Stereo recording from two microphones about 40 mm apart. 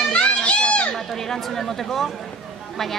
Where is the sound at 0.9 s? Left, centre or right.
Centre.